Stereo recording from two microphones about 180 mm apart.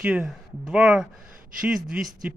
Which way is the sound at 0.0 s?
5° right (ahead or behind).